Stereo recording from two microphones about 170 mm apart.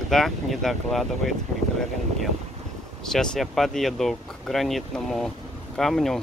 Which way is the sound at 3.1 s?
Centre (ahead or behind).